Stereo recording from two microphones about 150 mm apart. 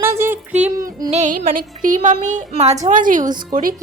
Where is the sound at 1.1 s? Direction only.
55° right (ahead or behind).